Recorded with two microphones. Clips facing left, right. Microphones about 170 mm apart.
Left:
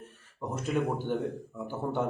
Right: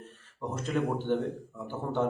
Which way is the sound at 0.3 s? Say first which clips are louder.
Even; 10° left (ahead or behind).